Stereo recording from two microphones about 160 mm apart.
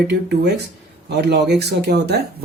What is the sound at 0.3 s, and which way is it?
Speech, 90° right.